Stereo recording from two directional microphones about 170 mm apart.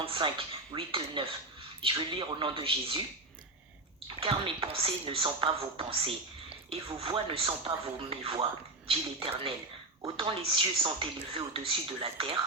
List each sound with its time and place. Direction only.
0.0 s speech: 30° right (ahead or behind)
4.2 s speech: 30° right (ahead or behind)
10.0 s speech: 30° right (ahead or behind)